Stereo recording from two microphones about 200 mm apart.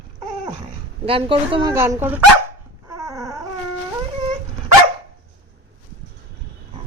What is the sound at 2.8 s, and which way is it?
Dog, 15° right (ahead or behind).